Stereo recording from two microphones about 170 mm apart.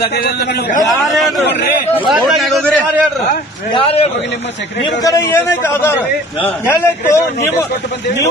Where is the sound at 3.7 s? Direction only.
35° left (ahead or behind).